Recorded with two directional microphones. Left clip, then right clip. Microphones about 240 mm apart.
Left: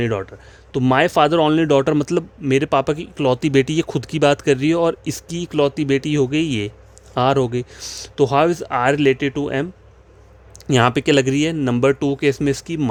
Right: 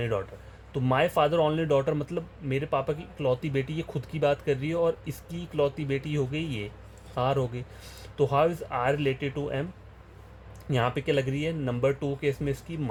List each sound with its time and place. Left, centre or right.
0.0 s speech: left
10.7 s speech: left